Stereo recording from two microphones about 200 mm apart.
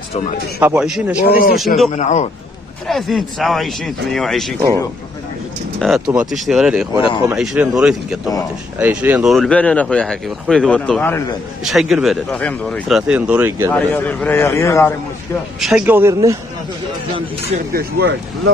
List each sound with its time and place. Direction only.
0.6 s speech: 5° right (ahead or behind)
1.2 s speech: 45° left (ahead or behind)
2.0 s speech: 35° left (ahead or behind)
2.9 s speech: centre (ahead or behind)
5.8 s speech: centre (ahead or behind)
11.6 s speech: centre (ahead or behind)
13.7 s a man's voice: 10° left (ahead or behind)
15.6 s a man's voice: 5° right (ahead or behind)
17.7 s speech: 55° right (ahead or behind)